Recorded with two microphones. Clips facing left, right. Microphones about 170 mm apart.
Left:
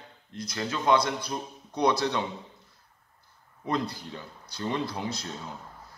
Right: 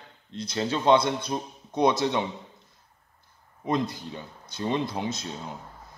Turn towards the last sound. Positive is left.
turn(degrees=-20)  # may be behind; listen again after turning